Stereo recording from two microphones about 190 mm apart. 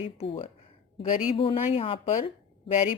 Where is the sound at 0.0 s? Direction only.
30° left (ahead or behind).